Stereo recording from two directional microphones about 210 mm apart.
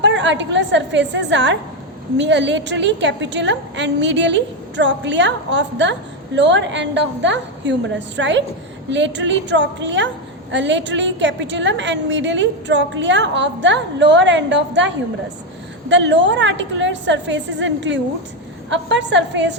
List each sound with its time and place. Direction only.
0.0 s a woman's voice: 60° right (ahead or behind)